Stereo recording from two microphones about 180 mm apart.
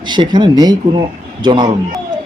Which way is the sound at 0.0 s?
25° right (ahead or behind).